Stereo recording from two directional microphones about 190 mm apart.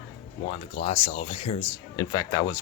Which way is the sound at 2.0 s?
20° left (ahead or behind).